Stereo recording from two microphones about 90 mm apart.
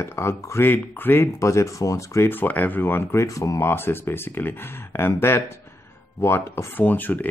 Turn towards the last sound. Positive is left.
turn(degrees=20)  # may be behind; listen again after turning